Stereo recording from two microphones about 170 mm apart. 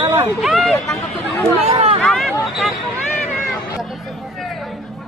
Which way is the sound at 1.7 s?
35° right (ahead or behind).